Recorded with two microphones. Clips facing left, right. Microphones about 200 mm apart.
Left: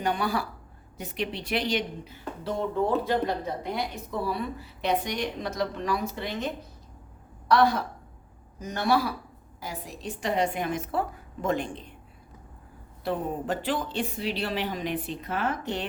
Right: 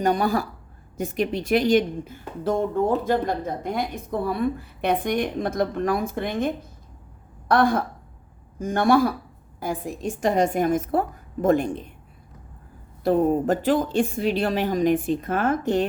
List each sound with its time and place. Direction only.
0.0 s a woman's voice: 45° right (ahead or behind)
13.1 s a woman's voice: 45° right (ahead or behind)